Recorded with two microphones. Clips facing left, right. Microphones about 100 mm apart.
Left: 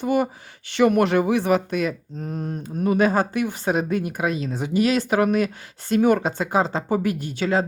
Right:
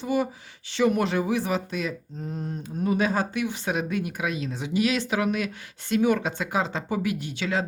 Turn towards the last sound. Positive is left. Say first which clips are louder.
# left 5 dB
turn(degrees=40)  # may be behind; listen again after turning